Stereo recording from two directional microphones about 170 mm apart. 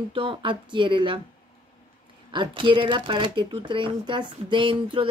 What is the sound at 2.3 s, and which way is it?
Speech, 30° right (ahead or behind).